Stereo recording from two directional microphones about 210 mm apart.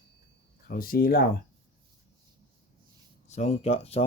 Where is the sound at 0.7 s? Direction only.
45° left (ahead or behind).